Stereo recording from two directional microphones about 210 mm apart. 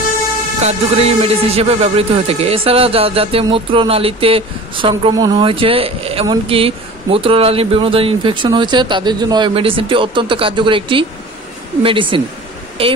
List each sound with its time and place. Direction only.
0.6 s speech: 30° right (ahead or behind)